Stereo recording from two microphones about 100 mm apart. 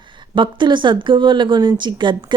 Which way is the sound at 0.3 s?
55° right (ahead or behind).